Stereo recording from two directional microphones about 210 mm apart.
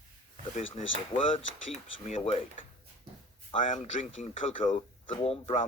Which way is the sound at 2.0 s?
35° left (ahead or behind).